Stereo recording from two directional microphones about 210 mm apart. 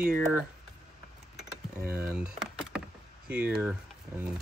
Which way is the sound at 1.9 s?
5° right (ahead or behind).